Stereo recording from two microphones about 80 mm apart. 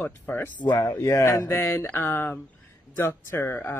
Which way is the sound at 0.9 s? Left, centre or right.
Left.